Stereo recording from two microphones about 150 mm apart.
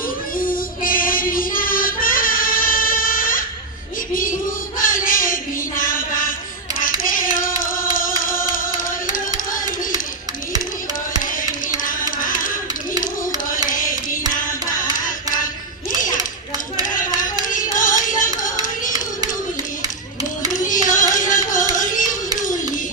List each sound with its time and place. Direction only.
0.3 s child singing: 65° left (ahead or behind)
4.1 s a sound: 65° left (ahead or behind)
7.0 s child singing: 65° left (ahead or behind)
8.2 s music: 65° left (ahead or behind)
11.8 s a sound: 65° left (ahead or behind)
13.7 s a sound: 65° left (ahead or behind)
14.9 s carnatic music: 65° left (ahead or behind)
17.5 s music: 60° left (ahead or behind)
20.8 s music: 60° left (ahead or behind)